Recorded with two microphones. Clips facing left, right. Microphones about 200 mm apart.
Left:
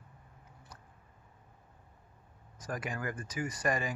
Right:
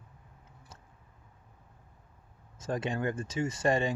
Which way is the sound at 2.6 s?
25° right (ahead or behind).